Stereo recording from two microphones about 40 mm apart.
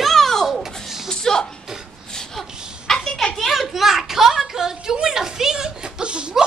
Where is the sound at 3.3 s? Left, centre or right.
Centre; by 6.3 s right.